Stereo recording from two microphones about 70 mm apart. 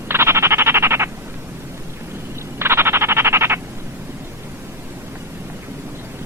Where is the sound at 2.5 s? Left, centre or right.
Right.